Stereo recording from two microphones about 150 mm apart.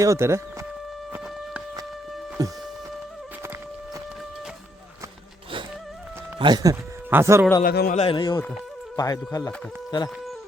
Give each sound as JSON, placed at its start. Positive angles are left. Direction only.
{"t": 0.0, "sound": "speech", "side_deg": -20}
{"t": 2.4, "sound": "speech", "side_deg": -25}
{"t": 6.4, "sound": "speech", "side_deg": -25}
{"t": 7.1, "sound": "a man's voice", "side_deg": -15}
{"t": 7.6, "sound": "a man's voice", "side_deg": 85}
{"t": 7.9, "sound": "speech", "side_deg": 35}